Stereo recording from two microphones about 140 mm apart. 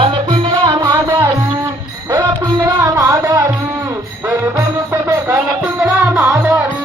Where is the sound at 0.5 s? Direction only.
30° right (ahead or behind).